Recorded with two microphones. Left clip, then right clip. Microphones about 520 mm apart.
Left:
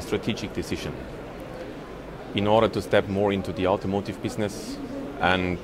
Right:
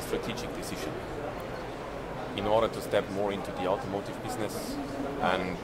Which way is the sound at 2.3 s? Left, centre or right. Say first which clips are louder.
Left 6 dB; left.